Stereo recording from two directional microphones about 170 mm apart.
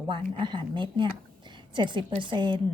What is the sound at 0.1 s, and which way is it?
A woman's voice, 30° right (ahead or behind).